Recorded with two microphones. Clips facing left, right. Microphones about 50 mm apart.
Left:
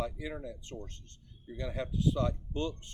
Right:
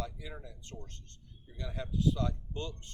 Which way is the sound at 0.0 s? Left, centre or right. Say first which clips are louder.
Left 5 dB; left.